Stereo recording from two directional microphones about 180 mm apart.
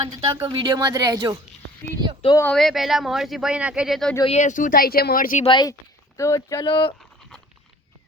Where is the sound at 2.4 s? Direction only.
5° left (ahead or behind).